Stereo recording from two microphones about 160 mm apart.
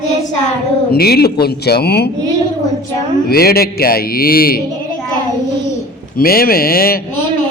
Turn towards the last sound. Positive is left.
turn(degrees=65)  # may be behind; listen again after turning